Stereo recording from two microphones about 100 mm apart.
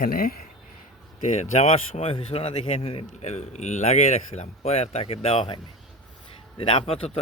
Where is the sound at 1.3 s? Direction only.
90° left.